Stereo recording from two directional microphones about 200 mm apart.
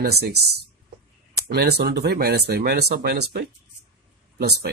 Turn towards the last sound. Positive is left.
turn(degrees=-50)  # may be behind; listen again after turning